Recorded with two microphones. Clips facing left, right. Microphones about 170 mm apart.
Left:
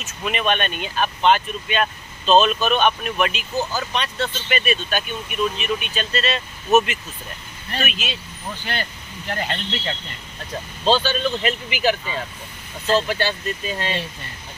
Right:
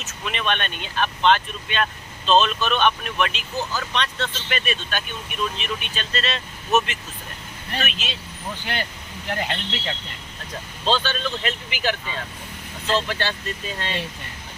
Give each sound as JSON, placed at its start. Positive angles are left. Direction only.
{"t": 0.0, "sound": "speech", "side_deg": 10}
{"t": 8.6, "sound": "speech", "side_deg": -15}
{"t": 10.8, "sound": "speech", "side_deg": 10}